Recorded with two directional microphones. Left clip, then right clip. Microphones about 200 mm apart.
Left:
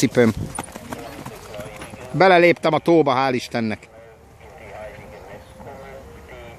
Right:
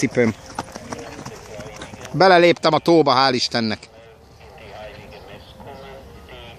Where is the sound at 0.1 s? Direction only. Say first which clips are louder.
Left 2 dB; 15° left (ahead or behind).